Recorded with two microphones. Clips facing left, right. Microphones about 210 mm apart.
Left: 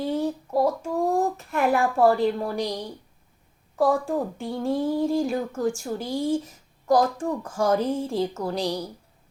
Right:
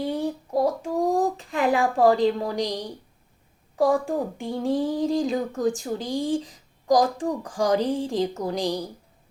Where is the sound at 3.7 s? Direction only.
15° right (ahead or behind).